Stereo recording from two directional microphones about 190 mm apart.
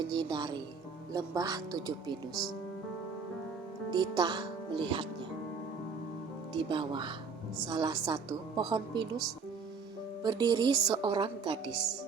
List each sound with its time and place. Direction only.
0.0 s speech: 25° right (ahead or behind)
3.9 s a woman's voice: 20° right (ahead or behind)
6.5 s a woman's voice: 25° right (ahead or behind)
10.2 s a woman's voice: 20° right (ahead or behind)